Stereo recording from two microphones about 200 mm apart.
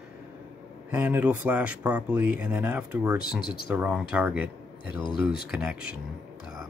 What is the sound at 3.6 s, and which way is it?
Speech, 5° right (ahead or behind).